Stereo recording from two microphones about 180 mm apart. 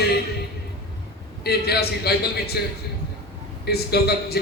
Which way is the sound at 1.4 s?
60° left (ahead or behind).